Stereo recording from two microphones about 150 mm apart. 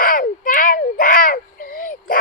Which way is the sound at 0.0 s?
70° left (ahead or behind).